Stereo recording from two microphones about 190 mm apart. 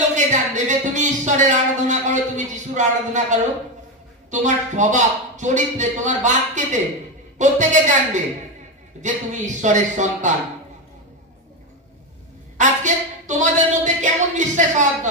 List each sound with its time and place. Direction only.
0.1 s a sound: 40° right (ahead or behind)
4.3 s a man's voice: 40° right (ahead or behind)
12.5 s speech: 40° right (ahead or behind)